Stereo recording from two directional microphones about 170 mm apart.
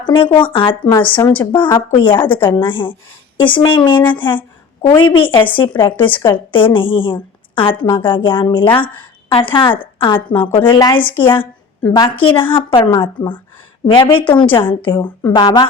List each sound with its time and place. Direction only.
0.0 s a woman's voice: 30° left (ahead or behind)
1.2 s a woman's voice: 10° left (ahead or behind)
1.9 s a woman's voice: 30° left (ahead or behind)